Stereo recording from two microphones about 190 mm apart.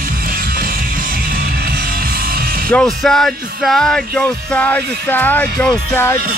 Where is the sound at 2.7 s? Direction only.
5° left (ahead or behind).